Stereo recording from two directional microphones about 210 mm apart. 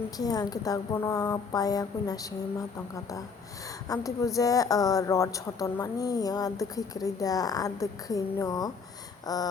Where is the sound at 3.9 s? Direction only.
15° left (ahead or behind).